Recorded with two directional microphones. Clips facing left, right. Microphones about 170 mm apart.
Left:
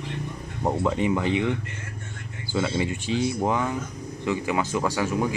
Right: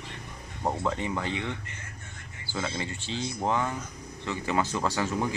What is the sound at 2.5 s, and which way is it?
Speech, 15° left (ahead or behind).